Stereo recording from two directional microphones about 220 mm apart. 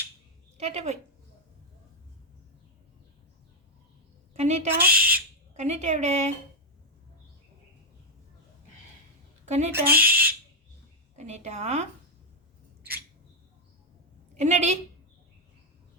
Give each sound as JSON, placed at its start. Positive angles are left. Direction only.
{"t": 0.5, "sound": "a woman's voice", "side_deg": -30}
{"t": 4.4, "sound": "a woman's voice", "side_deg": -30}
{"t": 4.8, "sound": "speech", "side_deg": -40}
{"t": 5.5, "sound": "a woman's voice", "side_deg": -30}
{"t": 9.5, "sound": "a woman's voice", "side_deg": -30}
{"t": 9.9, "sound": "speech", "side_deg": -40}
{"t": 11.2, "sound": "a woman's voice", "side_deg": -30}
{"t": 14.3, "sound": "a woman's voice", "side_deg": -30}